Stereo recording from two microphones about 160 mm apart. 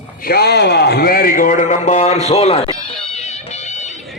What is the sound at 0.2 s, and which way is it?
A man's voice, 75° left (ahead or behind).